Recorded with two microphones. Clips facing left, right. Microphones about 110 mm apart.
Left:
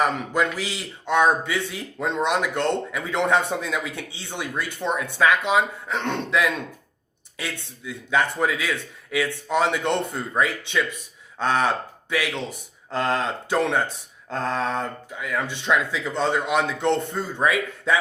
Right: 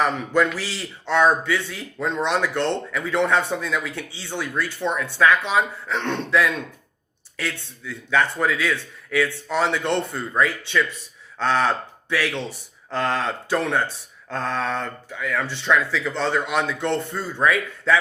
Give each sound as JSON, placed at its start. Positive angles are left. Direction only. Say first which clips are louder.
{"t": 0.0, "sound": "speech", "louder": "right 2 dB", "side_deg": 15}
{"t": 12.9, "sound": "speech", "louder": "even", "side_deg": 40}
{"t": 13.1, "sound": "speech", "louder": "even", "side_deg": 20}
{"t": 14.7, "sound": "speech", "louder": "even", "side_deg": 40}
{"t": 15.3, "sound": "speech", "louder": "right 1 dB", "side_deg": 15}